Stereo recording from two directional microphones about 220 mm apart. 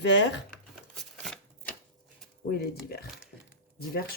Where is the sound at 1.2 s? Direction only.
5° left (ahead or behind).